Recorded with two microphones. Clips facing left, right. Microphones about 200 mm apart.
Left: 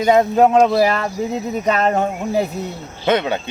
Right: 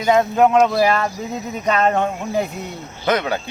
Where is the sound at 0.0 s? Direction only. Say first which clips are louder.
Left 2 dB; 30° left (ahead or behind).